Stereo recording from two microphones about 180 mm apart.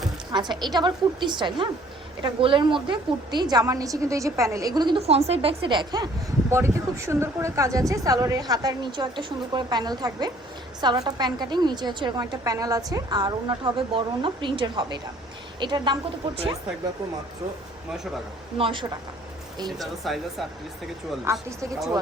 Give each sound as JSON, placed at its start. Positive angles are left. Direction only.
{"t": 0.3, "sound": "a woman's voice", "side_deg": -25}
{"t": 18.5, "sound": "a woman's voice", "side_deg": -30}
{"t": 20.1, "sound": "speech", "side_deg": 0}
{"t": 21.3, "sound": "speech", "side_deg": -15}